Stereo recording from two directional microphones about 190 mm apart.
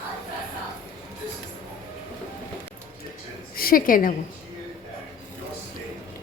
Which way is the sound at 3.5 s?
50° left (ahead or behind).